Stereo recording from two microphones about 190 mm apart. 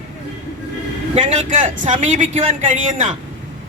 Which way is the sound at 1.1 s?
40° right (ahead or behind).